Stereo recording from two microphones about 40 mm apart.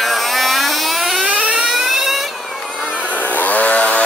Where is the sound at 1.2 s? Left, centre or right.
Right.